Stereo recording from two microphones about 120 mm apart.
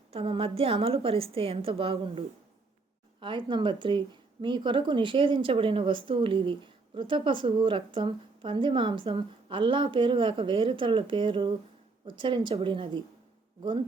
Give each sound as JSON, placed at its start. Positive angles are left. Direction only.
{"t": 0.1, "sound": "speech", "side_deg": -50}